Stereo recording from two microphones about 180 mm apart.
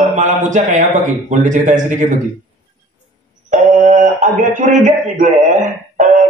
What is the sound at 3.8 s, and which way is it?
A man's voice, 45° right (ahead or behind).